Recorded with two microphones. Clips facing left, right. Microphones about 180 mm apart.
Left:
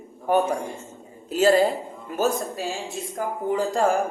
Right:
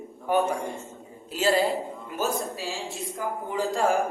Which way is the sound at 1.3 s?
50° left (ahead or behind).